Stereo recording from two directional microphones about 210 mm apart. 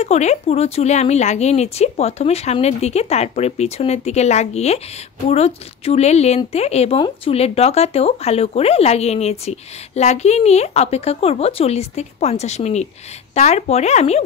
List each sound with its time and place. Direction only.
0.0 s speech: 30° left (ahead or behind)